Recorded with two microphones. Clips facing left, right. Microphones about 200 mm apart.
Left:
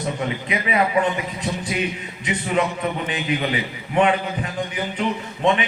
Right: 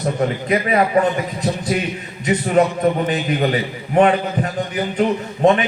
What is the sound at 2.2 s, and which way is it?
A man's voice, 40° right (ahead or behind).